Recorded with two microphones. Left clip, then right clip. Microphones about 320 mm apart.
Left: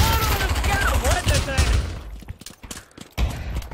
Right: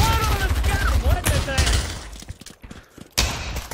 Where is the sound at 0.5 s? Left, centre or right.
Centre.